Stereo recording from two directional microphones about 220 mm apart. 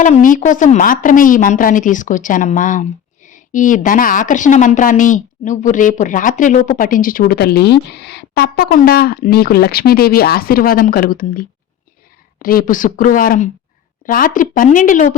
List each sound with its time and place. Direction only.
0.0 s a woman's voice: 35° left (ahead or behind)